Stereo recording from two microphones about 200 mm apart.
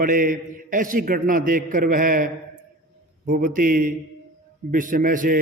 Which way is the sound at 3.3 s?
45° right (ahead or behind).